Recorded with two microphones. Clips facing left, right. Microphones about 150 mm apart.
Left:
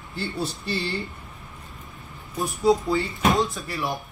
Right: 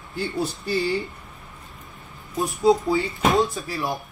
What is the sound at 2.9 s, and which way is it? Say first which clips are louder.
Speech: right 2 dB; centre (ahead or behind).